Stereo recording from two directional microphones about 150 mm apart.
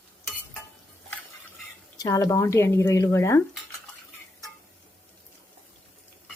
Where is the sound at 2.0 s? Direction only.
20° left (ahead or behind).